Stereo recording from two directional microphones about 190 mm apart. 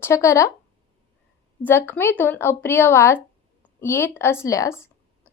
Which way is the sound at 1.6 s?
10° left (ahead or behind).